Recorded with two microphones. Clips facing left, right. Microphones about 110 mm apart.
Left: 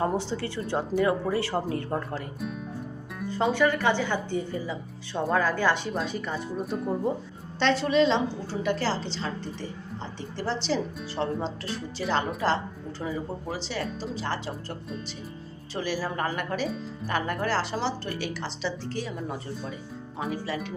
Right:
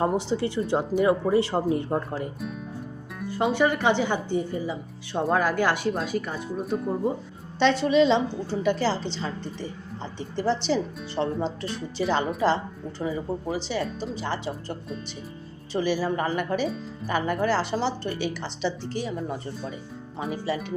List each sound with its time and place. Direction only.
0.0 s speech: 15° right (ahead or behind)
2.4 s speech: centre (ahead or behind)